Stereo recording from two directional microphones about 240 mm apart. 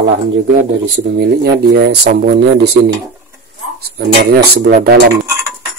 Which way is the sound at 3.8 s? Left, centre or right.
Right.